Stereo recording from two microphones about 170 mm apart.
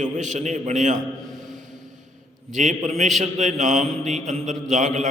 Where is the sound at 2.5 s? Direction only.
45° right (ahead or behind).